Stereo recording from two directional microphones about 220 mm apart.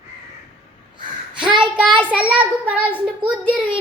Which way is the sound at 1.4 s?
20° right (ahead or behind).